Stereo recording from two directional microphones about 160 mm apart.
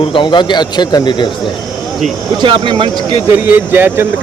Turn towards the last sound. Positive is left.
turn(degrees=-15)  # may be behind; listen again after turning